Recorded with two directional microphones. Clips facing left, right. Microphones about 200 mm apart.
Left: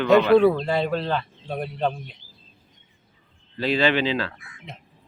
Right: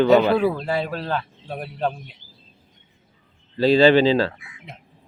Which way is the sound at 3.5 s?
30° right (ahead or behind).